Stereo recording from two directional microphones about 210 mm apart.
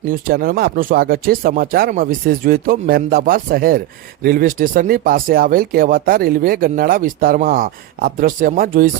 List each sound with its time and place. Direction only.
0.1 s speech: 45° right (ahead or behind)